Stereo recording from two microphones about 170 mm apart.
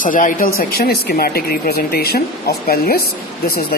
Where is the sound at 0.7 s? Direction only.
65° left (ahead or behind).